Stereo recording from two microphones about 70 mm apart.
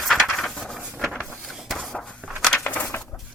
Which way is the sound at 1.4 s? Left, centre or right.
Centre.